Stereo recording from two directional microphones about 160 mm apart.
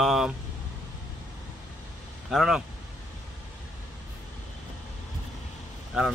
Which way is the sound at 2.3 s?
Centre (ahead or behind).